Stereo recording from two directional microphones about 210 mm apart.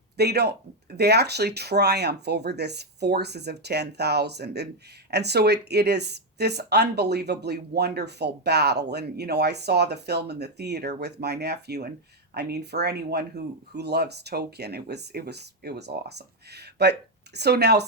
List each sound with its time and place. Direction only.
0.2 s speech: 50° right (ahead or behind)